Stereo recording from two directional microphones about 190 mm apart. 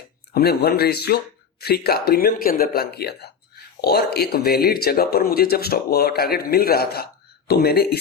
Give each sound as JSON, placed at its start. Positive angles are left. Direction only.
{"t": 0.3, "sound": "speech", "side_deg": 55}